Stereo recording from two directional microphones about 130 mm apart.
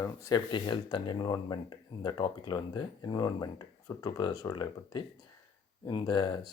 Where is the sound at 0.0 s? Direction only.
30° left (ahead or behind).